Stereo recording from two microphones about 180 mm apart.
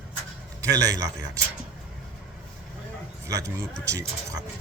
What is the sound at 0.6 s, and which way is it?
Speech, 20° right (ahead or behind).